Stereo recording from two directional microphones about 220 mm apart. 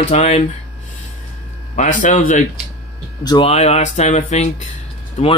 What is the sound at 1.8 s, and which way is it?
Speech, 35° left (ahead or behind).